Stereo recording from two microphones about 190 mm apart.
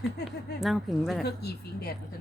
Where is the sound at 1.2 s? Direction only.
55° left (ahead or behind).